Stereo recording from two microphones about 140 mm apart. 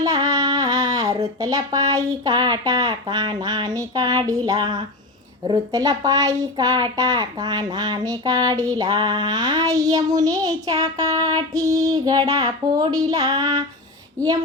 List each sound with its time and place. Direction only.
0.0 s speech: 25° right (ahead or behind)